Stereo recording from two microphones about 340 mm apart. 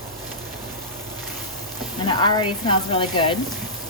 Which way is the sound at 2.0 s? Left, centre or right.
Centre.